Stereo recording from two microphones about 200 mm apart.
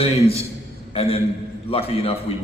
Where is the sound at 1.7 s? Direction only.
30° left (ahead or behind).